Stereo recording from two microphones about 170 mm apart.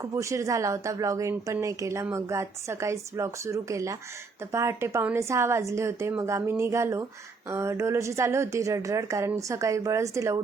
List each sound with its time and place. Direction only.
0.0 s a woman's voice: 15° right (ahead or behind)